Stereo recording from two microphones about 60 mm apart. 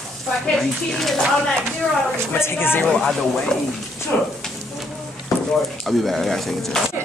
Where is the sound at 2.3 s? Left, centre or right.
Left.